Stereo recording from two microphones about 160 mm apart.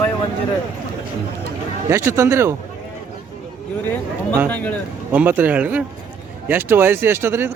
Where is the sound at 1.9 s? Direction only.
15° right (ahead or behind).